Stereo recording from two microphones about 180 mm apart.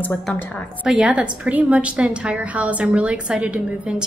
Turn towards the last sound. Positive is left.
turn(degrees=-5)  # may be behind; listen again after turning